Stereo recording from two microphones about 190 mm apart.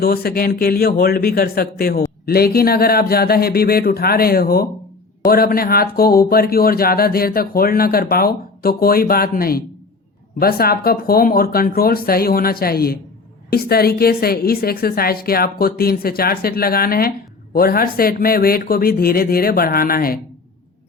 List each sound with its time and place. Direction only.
0.0 s speech: 55° left (ahead or behind)